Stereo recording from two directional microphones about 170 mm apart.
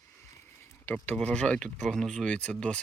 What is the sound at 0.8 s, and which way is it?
Speech, 10° left (ahead or behind).